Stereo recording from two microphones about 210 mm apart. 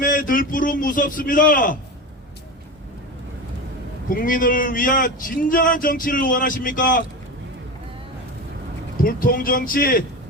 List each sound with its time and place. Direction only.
0.0 s speech: 40° left (ahead or behind)
4.1 s speech: 40° left (ahead or behind)
9.0 s speech: 40° left (ahead or behind)